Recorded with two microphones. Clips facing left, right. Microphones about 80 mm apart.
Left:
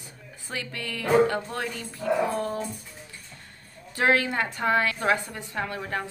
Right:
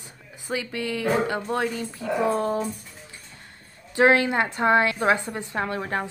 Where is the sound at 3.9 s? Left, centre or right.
Right.